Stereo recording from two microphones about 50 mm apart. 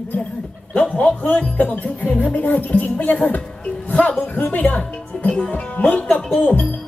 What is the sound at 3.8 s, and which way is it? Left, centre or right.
Music, left.